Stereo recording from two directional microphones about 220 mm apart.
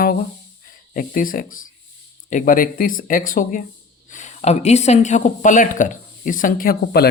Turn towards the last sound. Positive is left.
turn(degrees=45)  # may be behind; listen again after turning